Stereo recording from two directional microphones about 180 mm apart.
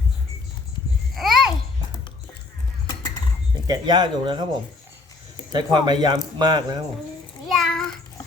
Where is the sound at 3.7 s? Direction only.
25° right (ahead or behind).